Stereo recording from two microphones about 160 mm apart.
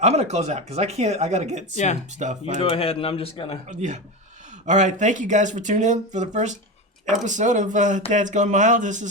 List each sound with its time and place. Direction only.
0.0 s speech: 45° right (ahead or behind)
1.7 s speech: 45° left (ahead or behind)
2.1 s speech: 50° right (ahead or behind)
2.6 s speech: 35° left (ahead or behind)
3.7 s speech: 45° right (ahead or behind)